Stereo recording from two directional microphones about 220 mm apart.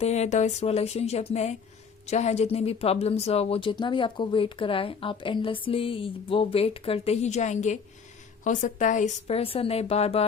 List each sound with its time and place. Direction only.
0.0 s speech: 30° left (ahead or behind)